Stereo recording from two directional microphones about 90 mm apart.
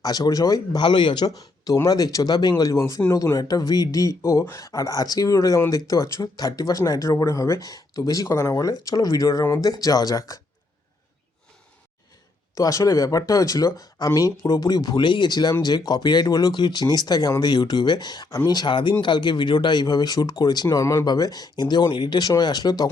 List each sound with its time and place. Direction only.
0.0 s speech: 45° left (ahead or behind)
12.5 s speech: 40° left (ahead or behind)
20.8 s speech: 40° left (ahead or behind)